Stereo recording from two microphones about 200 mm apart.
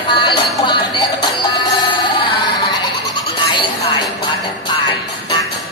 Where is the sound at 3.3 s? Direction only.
25° left (ahead or behind).